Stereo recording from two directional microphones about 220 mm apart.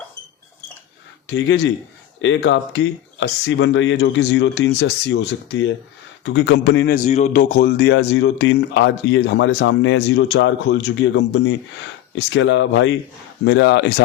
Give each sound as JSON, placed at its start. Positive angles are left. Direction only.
{"t": 1.3, "sound": "a man's voice", "side_deg": 55}
{"t": 7.4, "sound": "a man's voice", "side_deg": 45}